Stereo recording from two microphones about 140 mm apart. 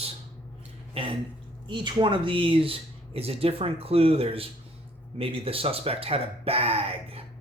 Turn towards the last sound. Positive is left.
turn(degrees=-45)  # may be behind; listen again after turning